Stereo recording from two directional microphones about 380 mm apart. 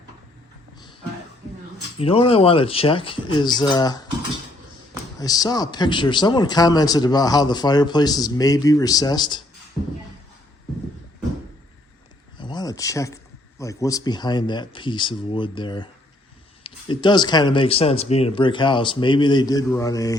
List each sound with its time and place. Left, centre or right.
2.0 s a man's voice: centre
5.2 s a man's voice: centre
12.4 s a sound: centre
13.6 s a man's voice: centre